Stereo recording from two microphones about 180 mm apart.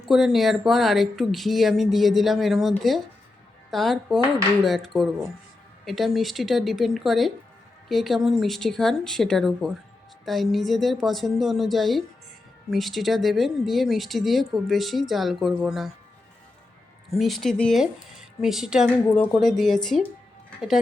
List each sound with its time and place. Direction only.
0.0 s speech: centre (ahead or behind)
17.1 s speech: centre (ahead or behind)
18.9 s a woman's voice: 5° left (ahead or behind)